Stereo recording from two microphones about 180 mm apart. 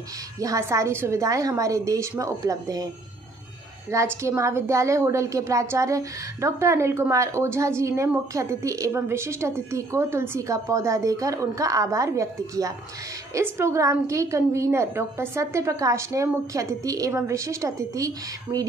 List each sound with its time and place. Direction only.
0.4 s a woman's voice: 15° right (ahead or behind)
3.9 s a woman's voice: 15° right (ahead or behind)